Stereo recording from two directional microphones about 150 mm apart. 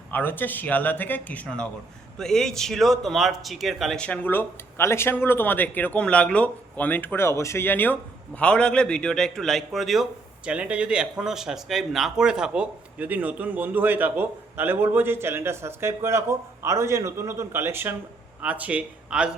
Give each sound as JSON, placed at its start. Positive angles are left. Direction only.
{"t": 0.1, "sound": "a man's voice", "side_deg": 15}